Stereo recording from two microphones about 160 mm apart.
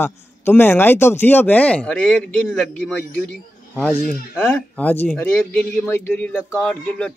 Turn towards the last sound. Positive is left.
turn(degrees=5)  # may be behind; listen again after turning